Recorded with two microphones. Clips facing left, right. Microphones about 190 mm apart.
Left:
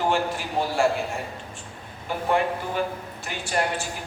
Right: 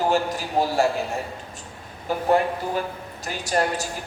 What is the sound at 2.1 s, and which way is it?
A man's voice, 40° right (ahead or behind).